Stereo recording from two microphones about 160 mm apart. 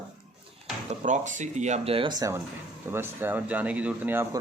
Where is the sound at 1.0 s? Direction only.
50° right (ahead or behind); by 4.4 s 15° right (ahead or behind).